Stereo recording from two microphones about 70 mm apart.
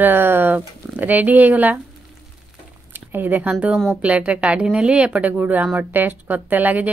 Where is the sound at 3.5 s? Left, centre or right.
Centre.